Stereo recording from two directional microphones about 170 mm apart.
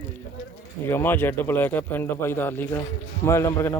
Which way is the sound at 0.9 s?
10° left (ahead or behind).